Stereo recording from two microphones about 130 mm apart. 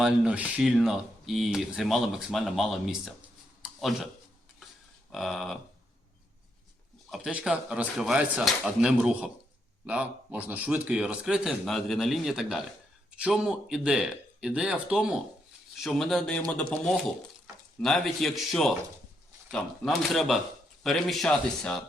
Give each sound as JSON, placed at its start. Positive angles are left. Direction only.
{"t": 0.0, "sound": "speech", "side_deg": -10}
{"t": 3.6, "sound": "a sound", "side_deg": 0}
{"t": 5.1, "sound": "speech", "side_deg": 0}
{"t": 7.1, "sound": "speech", "side_deg": -5}